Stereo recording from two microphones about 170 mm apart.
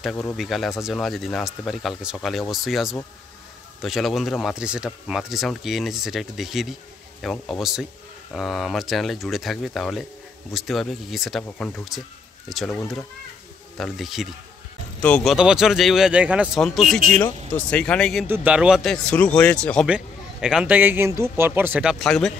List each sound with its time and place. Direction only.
0.0 s speech: 10° left (ahead or behind)
13.7 s speech: centre (ahead or behind)
18.2 s a man's voice: 10° right (ahead or behind)